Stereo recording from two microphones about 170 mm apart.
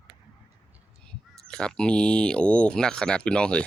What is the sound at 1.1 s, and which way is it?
Speech, 5° left (ahead or behind).